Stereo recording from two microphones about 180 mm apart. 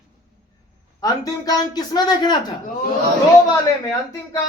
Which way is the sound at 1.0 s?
20° left (ahead or behind).